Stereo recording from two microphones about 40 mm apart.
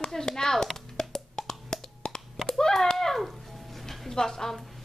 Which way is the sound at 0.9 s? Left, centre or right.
Centre.